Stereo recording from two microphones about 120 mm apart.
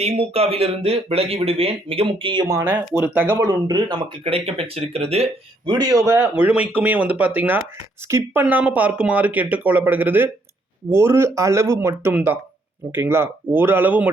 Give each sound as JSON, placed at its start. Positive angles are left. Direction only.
{"t": 0.0, "sound": "speech", "side_deg": -55}
{"t": 2.5, "sound": "speech", "side_deg": -20}
{"t": 4.2, "sound": "speech", "side_deg": -55}
{"t": 5.6, "sound": "speech", "side_deg": -35}
{"t": 6.1, "sound": "speech", "side_deg": -15}